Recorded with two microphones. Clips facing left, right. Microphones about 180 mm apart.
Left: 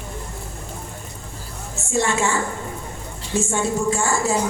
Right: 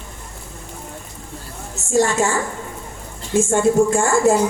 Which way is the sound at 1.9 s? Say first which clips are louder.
Right 4 dB; 40° right (ahead or behind).